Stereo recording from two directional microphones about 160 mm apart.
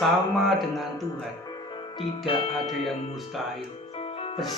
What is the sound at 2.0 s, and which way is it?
Speech, 35° left (ahead or behind).